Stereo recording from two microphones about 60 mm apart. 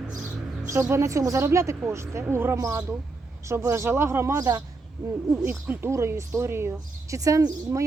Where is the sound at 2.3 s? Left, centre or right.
Right.